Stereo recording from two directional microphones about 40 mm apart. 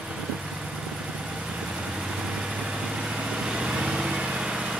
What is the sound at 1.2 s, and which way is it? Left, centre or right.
Vehicle, right.